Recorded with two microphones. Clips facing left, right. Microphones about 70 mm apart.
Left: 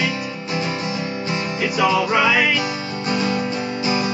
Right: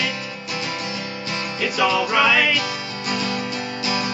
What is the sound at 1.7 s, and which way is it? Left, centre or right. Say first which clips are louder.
Music: left 1 dB; centre.